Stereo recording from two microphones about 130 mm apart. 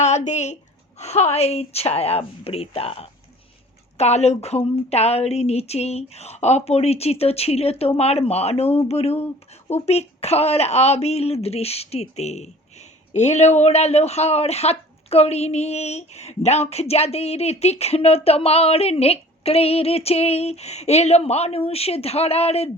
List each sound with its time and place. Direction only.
0.0 s speech: 65° left (ahead or behind)